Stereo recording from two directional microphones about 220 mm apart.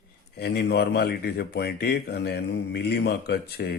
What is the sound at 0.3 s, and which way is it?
Speech, 45° left (ahead or behind).